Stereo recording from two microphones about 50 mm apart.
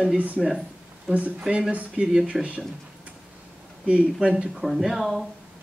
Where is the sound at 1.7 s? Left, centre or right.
Right.